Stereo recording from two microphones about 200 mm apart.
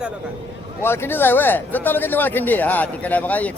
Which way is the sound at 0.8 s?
10° left (ahead or behind).